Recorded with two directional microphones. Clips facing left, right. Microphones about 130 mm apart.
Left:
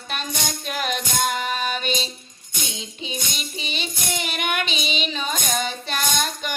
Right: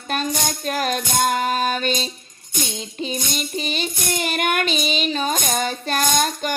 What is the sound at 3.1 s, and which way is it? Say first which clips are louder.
Music: right 4 dB; 45° right (ahead or behind).